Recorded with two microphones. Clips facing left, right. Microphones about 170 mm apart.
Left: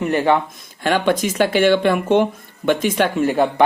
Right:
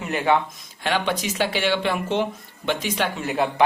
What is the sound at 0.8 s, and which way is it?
Speech, 50° left (ahead or behind).